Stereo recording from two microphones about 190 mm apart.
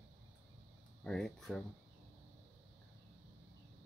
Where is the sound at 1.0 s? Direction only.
5° left (ahead or behind).